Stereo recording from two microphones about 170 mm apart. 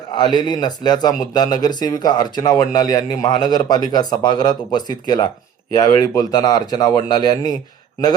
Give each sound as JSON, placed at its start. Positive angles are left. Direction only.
{"t": 0.1, "sound": "speech", "side_deg": 25}